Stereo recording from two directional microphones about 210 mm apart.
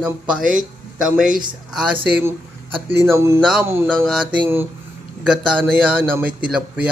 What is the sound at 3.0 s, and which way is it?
A man's voice, 10° right (ahead or behind).